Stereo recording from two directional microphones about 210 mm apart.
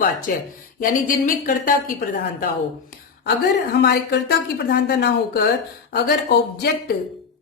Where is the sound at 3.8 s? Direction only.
50° left (ahead or behind).